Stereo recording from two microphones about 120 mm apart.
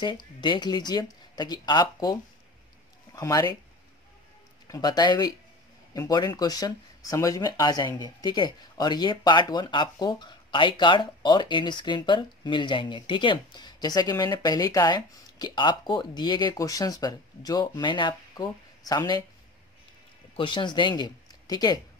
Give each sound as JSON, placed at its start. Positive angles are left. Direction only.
{"t": 0.0, "sound": "speech", "side_deg": 40}
{"t": 3.2, "sound": "speech", "side_deg": 30}
{"t": 4.6, "sound": "speech", "side_deg": 30}
{"t": 20.3, "sound": "speech", "side_deg": 45}